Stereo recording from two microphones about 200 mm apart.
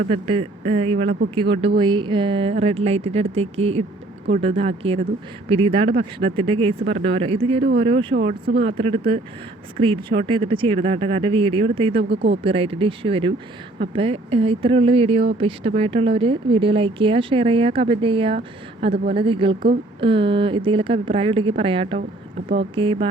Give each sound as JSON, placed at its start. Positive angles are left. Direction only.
{"t": 0.1, "sound": "speech", "side_deg": -30}
{"t": 12.0, "sound": "speech", "side_deg": -60}
{"t": 12.4, "sound": "speech", "side_deg": -30}